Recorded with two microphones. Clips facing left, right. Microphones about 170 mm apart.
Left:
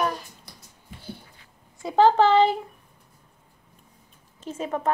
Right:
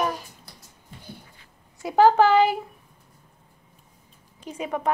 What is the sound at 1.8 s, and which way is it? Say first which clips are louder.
Speech: right 1 dB; 5° right (ahead or behind).